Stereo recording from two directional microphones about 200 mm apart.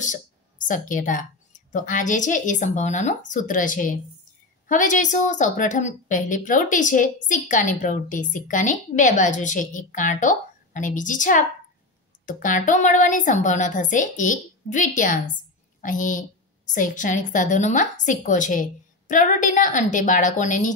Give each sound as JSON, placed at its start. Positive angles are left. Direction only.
{"t": 0.0, "sound": "a woman's voice", "side_deg": 40}